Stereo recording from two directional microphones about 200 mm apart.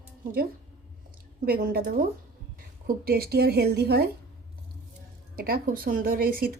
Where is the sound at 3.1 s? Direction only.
50° right (ahead or behind).